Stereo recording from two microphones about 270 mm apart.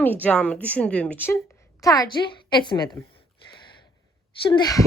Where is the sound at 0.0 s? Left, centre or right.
Centre.